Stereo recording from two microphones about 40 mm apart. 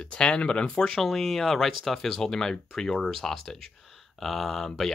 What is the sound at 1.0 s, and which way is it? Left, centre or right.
Speech, centre.